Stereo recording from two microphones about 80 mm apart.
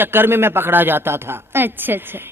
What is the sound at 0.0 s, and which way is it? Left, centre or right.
A man's voice, right.